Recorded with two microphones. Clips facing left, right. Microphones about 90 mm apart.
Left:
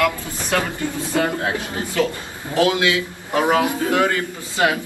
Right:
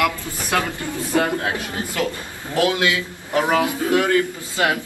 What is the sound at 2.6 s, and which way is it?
A man's voice, 20° left (ahead or behind).